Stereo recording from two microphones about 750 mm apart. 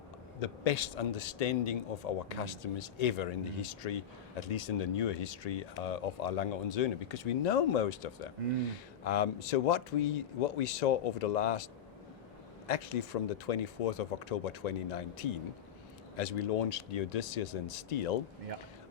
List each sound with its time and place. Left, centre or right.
0.3 s speech: left
12.6 s speech: left